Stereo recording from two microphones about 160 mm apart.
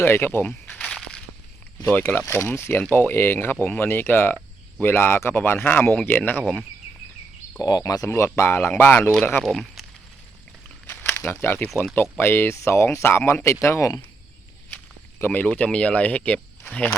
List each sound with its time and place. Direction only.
0.0 s a sound: 15° left (ahead or behind)
1.9 s speech: 10° left (ahead or behind)
6.4 s speech: centre (ahead or behind)
7.6 s speech: 20° left (ahead or behind)
9.4 s speech: centre (ahead or behind)
10.8 s a sound: 10° left (ahead or behind)
12.1 s speech: 15° left (ahead or behind)
15.2 s speech: 10° left (ahead or behind)